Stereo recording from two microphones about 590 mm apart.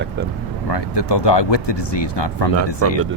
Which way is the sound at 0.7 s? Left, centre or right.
Left.